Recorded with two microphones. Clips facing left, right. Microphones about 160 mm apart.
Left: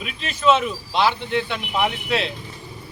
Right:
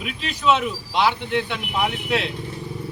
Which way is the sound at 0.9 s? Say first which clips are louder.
Even; 15° right (ahead or behind).